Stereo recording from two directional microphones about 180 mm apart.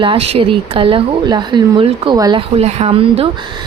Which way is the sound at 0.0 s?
30° right (ahead or behind).